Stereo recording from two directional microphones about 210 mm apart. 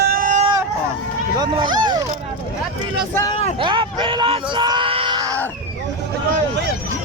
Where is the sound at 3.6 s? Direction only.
20° right (ahead or behind).